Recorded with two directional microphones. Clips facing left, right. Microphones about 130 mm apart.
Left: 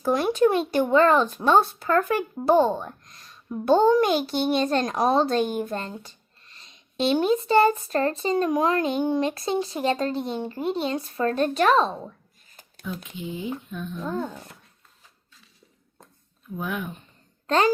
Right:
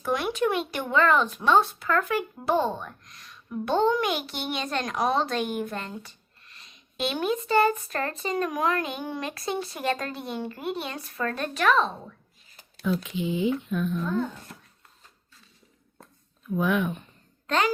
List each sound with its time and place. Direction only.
0.0 s speech: 35° left (ahead or behind)
2.6 s a child's voice: 30° left (ahead or behind)
12.5 s a sound: 45° left (ahead or behind)
12.8 s speech: 90° right
16.6 s speech: 90° right
17.4 s a sound: 35° left (ahead or behind)